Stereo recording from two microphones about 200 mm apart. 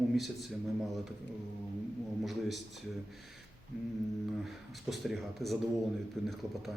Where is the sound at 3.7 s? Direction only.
5° right (ahead or behind).